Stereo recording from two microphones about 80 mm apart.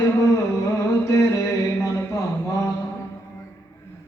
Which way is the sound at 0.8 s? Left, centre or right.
Left.